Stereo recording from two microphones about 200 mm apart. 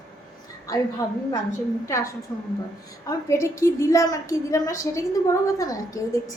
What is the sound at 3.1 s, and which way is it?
A woman's voice, 15° left (ahead or behind).